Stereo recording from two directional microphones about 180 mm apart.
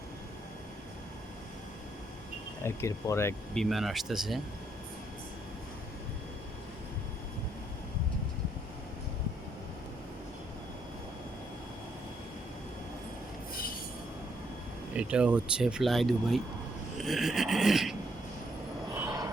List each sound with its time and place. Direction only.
2.6 s speech: 15° left (ahead or behind)
3.5 s speech: centre (ahead or behind)
14.9 s speech: 5° right (ahead or behind)
19.0 s vehicle: 20° right (ahead or behind)